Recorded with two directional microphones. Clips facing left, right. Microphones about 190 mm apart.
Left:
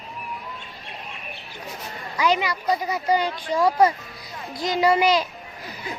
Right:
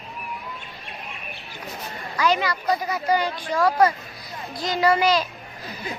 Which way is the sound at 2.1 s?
15° left (ahead or behind).